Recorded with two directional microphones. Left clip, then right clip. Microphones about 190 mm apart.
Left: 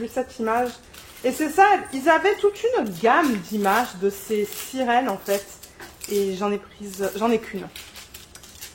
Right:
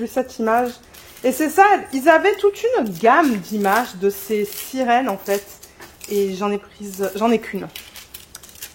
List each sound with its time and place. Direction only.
0.1 s a woman's voice: 55° right (ahead or behind)